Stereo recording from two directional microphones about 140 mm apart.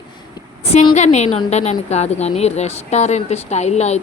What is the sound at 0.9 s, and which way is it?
A woman's voice, 55° left (ahead or behind).